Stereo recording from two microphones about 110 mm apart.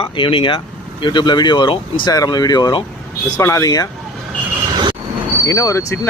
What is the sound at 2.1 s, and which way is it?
Speech, 35° left (ahead or behind).